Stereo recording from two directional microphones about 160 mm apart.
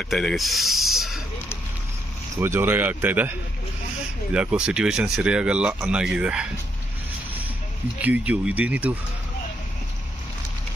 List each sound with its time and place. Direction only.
0.0 s speech: centre (ahead or behind)
2.4 s speech: 15° right (ahead or behind)
8.0 s speech: 10° right (ahead or behind)